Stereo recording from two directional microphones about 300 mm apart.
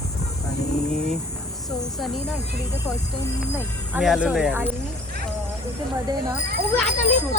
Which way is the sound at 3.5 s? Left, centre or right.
Centre.